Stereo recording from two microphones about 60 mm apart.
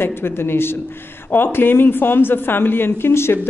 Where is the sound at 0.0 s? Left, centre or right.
Left.